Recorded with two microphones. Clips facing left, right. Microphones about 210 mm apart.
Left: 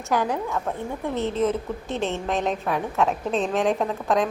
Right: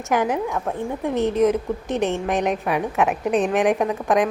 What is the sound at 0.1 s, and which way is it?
A woman's voice, 20° right (ahead or behind).